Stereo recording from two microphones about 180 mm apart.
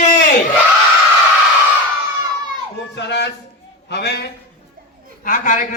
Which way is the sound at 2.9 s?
70° left (ahead or behind).